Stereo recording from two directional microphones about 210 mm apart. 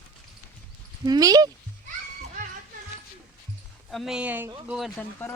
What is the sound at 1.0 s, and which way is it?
Speech, 15° right (ahead or behind).